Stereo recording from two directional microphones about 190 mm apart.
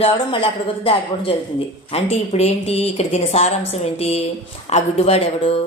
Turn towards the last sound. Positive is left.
turn(degrees=30)  # may be behind; listen again after turning